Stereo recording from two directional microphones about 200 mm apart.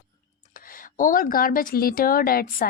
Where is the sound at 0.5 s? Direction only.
45° left (ahead or behind).